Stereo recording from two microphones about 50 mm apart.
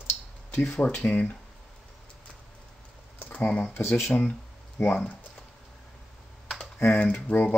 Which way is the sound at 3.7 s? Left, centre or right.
Left.